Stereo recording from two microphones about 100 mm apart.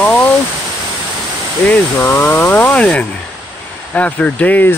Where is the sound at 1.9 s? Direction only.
25° left (ahead or behind).